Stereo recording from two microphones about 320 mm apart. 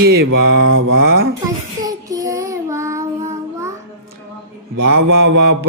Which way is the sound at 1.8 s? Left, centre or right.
Centre.